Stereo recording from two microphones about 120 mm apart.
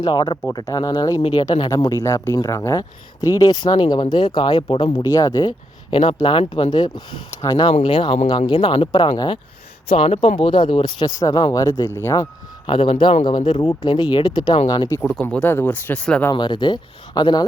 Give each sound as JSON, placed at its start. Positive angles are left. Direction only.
{"t": 0.0, "sound": "speech", "side_deg": 35}
{"t": 7.7, "sound": "speech", "side_deg": 45}
{"t": 9.9, "sound": "speech", "side_deg": 50}
{"t": 11.6, "sound": "speech", "side_deg": 25}
{"t": 12.6, "sound": "speech", "side_deg": 45}
{"t": 15.2, "sound": "speech", "side_deg": 10}
{"t": 16.3, "sound": "speech", "side_deg": 40}